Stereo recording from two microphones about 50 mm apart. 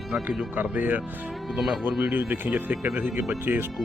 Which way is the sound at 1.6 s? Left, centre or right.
Centre.